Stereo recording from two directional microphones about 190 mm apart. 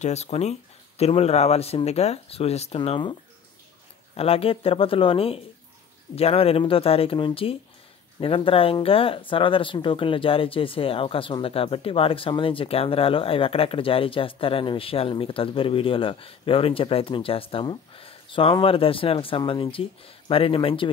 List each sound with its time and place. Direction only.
0.0 s speech: 35° left (ahead or behind)
4.2 s speech: 30° left (ahead or behind)